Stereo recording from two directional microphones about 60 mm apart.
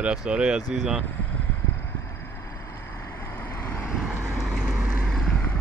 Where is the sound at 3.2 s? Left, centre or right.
Left.